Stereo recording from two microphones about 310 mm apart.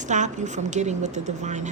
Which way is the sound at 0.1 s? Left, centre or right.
Right.